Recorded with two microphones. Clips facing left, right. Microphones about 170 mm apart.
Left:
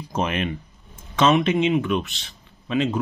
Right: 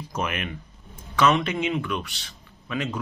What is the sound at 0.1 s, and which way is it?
A man's voice, 30° left (ahead or behind).